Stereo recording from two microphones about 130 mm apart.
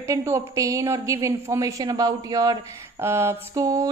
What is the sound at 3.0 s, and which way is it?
Speech, 20° right (ahead or behind).